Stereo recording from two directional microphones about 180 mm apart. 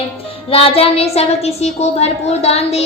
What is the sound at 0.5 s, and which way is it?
A woman's voice, 30° left (ahead or behind).